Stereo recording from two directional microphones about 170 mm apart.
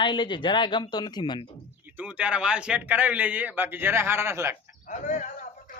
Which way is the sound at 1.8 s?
10° right (ahead or behind).